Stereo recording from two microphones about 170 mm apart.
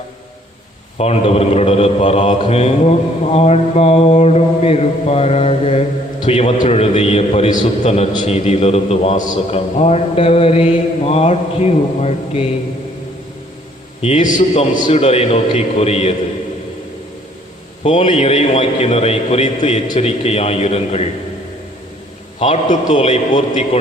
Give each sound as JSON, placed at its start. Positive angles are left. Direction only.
{"t": 0.9, "sound": "a man's voice", "side_deg": 40}
{"t": 14.0, "sound": "a man's voice", "side_deg": 45}
{"t": 17.8, "sound": "a man's voice", "side_deg": 30}
{"t": 22.4, "sound": "a man's voice", "side_deg": 45}